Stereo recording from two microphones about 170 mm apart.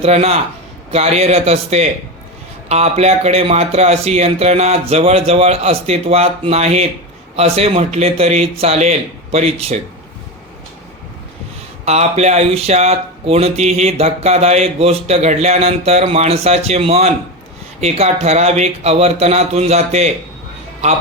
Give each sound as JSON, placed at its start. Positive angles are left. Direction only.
{"t": 0.0, "sound": "speech", "side_deg": -35}
{"t": 11.9, "sound": "speech", "side_deg": -40}